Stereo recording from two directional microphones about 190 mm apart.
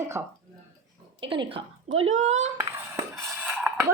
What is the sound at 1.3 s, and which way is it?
A woman's voice, 25° right (ahead or behind).